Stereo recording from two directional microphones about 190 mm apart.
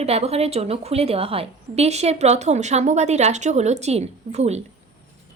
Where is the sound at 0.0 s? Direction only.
35° right (ahead or behind).